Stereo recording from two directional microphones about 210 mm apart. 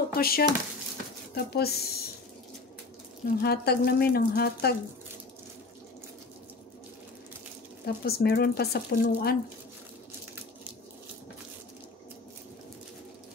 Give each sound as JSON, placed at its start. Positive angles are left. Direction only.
{"t": 0.1, "sound": "speech", "side_deg": 45}
{"t": 3.3, "sound": "speech", "side_deg": 50}
{"t": 7.8, "sound": "speech", "side_deg": 50}